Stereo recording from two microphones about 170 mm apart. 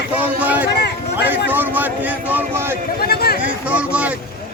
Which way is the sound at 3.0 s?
65° left (ahead or behind).